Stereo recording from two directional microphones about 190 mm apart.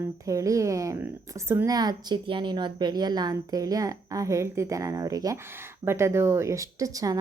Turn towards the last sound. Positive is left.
turn(degrees=-20)  # may be behind; listen again after turning